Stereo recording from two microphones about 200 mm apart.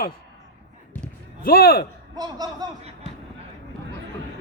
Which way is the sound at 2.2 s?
20° right (ahead or behind).